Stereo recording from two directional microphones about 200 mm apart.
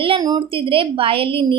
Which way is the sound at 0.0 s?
25° right (ahead or behind).